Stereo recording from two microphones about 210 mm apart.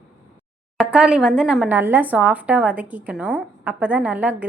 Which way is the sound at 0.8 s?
5° right (ahead or behind).